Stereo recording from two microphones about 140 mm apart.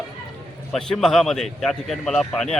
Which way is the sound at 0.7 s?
5° left (ahead or behind).